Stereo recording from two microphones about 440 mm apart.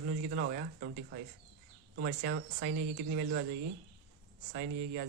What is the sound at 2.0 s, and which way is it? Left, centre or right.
Speech, right.